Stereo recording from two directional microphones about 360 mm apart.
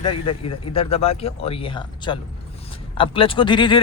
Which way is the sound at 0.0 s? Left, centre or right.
Centre.